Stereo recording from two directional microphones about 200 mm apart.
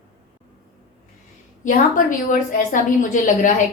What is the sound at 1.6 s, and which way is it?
A woman's voice, 40° left (ahead or behind).